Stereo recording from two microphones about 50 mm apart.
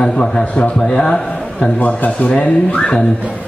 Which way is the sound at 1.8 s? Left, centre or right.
Left.